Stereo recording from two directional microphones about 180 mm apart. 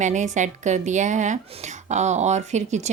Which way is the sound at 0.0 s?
40° right (ahead or behind).